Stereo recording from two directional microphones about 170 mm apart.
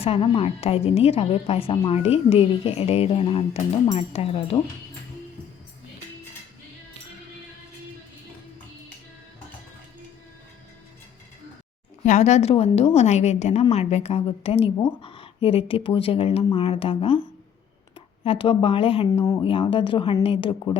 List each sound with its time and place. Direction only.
0.0 s a woman's voice: 35° left (ahead or behind)
12.0 s a woman's voice: 45° left (ahead or behind)
18.2 s a woman's voice: 35° left (ahead or behind)
19.1 s a woman's voice: 20° left (ahead or behind)
19.4 s a woman's voice: 30° left (ahead or behind)